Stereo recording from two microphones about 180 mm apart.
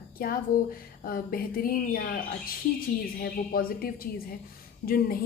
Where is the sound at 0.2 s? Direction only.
55° left (ahead or behind).